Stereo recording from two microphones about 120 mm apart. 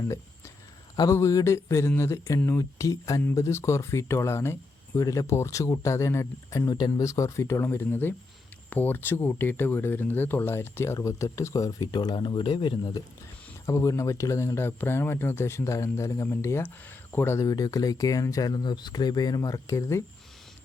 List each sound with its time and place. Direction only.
0.9 s speech: 25° left (ahead or behind)
6.7 s speech: 35° left (ahead or behind)
13.7 s speech: 30° left (ahead or behind)